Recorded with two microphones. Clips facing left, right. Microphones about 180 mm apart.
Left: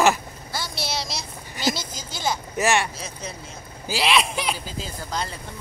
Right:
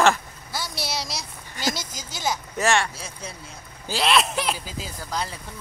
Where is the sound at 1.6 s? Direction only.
45° right (ahead or behind).